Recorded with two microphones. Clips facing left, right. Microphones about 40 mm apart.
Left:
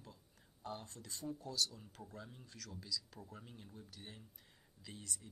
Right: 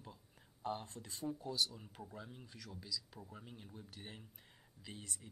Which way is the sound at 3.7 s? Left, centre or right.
Right.